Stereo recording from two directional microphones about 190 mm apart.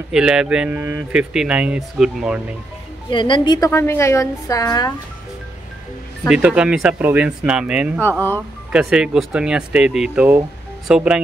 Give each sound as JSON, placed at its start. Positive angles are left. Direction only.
{"t": 0.1, "sound": "speech", "side_deg": -5}
{"t": 3.1, "sound": "a woman's voice", "side_deg": 25}
{"t": 6.2, "sound": "speech", "side_deg": -5}